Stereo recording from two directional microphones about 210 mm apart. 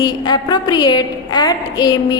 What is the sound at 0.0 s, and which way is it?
A woman's voice, 20° left (ahead or behind).